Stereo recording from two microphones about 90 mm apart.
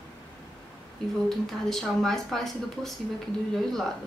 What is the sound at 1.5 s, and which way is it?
Speech, 5° left (ahead or behind).